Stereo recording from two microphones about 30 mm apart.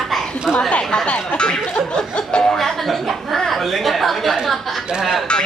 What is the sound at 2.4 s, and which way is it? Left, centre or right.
Chuckle, centre.